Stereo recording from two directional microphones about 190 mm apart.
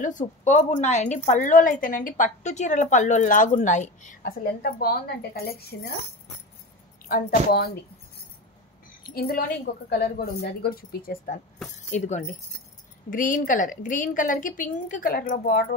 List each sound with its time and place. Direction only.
0.0 s a woman's voice: 40° left (ahead or behind)
7.1 s a woman's voice: 55° left (ahead or behind)
9.1 s a woman's voice: 55° left (ahead or behind)
11.9 s a woman's voice: 40° left (ahead or behind)